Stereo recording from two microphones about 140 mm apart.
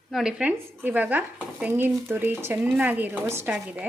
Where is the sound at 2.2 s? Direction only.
15° right (ahead or behind).